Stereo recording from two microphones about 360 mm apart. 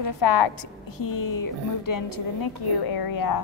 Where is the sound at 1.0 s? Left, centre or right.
Left.